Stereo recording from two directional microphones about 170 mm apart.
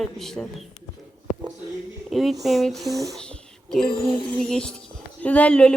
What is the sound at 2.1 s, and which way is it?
Speech, centre (ahead or behind).